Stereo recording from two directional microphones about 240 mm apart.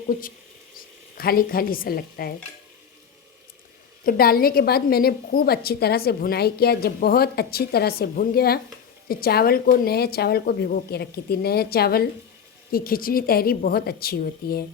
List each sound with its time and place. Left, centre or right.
1.2 s a woman's voice: left
4.0 s a woman's voice: left